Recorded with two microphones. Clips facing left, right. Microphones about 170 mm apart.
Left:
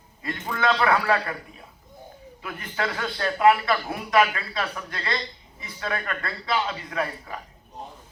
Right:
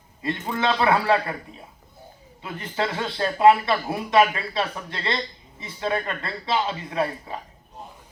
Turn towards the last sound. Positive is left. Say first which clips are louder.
# right 3 dB
turn(degrees=-25)  # may be behind; listen again after turning